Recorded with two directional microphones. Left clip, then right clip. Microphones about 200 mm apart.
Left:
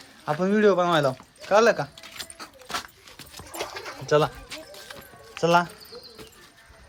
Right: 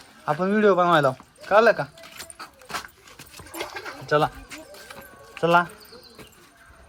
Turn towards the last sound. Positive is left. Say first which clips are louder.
# right 1 dB
turn(degrees=10)  # may be behind; listen again after turning